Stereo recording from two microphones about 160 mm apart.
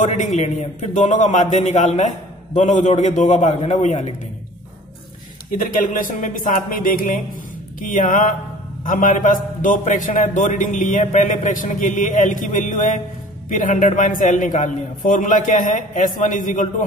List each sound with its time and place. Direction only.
0.0 s a man's voice: 50° left (ahead or behind)
5.5 s a man's voice: 55° left (ahead or behind)